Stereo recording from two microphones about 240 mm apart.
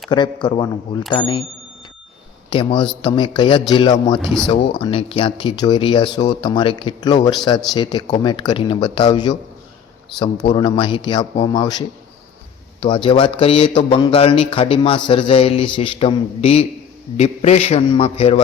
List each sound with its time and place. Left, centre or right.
0.1 s a man's voice: centre
2.5 s speech: left
4.2 s speech: centre
4.4 s a man's voice: left